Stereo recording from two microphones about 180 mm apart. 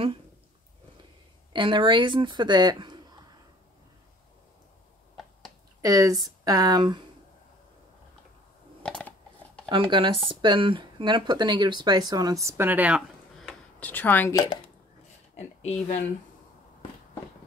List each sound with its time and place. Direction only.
1.5 s speech: 25° right (ahead or behind)
5.8 s speech: 20° right (ahead or behind)
9.7 s speech: 25° right (ahead or behind); by 13.6 s 5° right (ahead or behind)
13.7 s speech: 10° left (ahead or behind)
15.3 s speech: 35° left (ahead or behind)